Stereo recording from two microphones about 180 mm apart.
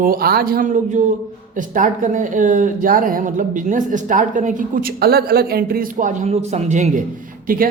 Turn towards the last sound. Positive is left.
turn(degrees=-50)  # may be behind; listen again after turning